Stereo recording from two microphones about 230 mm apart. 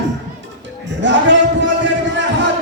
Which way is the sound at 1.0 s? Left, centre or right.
Right.